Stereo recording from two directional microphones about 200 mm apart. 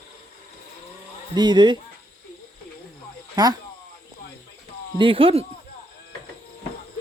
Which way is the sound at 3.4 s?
20° right (ahead or behind).